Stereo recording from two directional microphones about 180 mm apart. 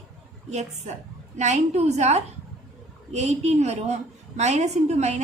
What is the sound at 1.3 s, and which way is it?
A woman's voice, 40° right (ahead or behind).